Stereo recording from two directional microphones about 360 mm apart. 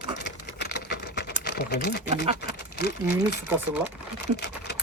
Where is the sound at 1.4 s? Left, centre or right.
Left.